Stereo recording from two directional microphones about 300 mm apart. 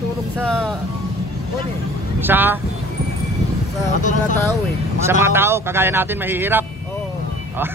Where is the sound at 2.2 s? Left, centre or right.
Centre.